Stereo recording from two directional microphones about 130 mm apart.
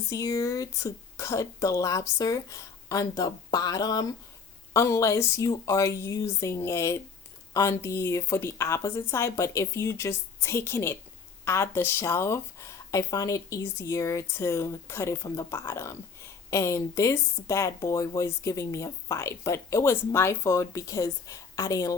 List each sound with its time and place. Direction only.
0.1 s speech: 25° left (ahead or behind)